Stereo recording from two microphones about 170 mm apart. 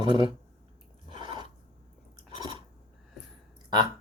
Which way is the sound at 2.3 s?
25° right (ahead or behind).